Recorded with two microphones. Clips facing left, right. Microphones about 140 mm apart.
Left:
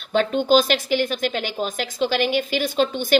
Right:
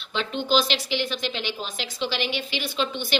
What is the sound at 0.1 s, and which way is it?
A woman's voice, 45° left (ahead or behind).